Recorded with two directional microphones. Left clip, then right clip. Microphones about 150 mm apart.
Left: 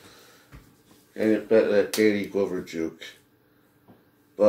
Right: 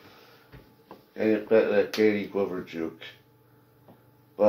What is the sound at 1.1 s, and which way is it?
Speech, 25° left (ahead or behind).